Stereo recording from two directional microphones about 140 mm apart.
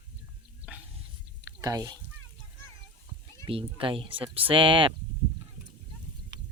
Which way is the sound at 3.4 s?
40° right (ahead or behind).